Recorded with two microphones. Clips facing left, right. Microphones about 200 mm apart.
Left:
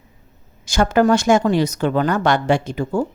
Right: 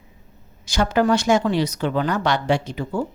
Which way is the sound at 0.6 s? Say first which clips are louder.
Left 4 dB; 50° left (ahead or behind).